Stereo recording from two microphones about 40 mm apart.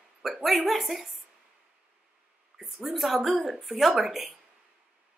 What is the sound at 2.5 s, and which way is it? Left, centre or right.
A woman's voice, centre.